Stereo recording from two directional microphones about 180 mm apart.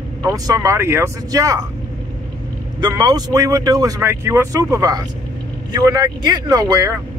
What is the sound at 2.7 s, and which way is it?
Speech, 20° right (ahead or behind).